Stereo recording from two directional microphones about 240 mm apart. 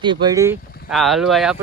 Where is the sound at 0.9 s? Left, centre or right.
Centre.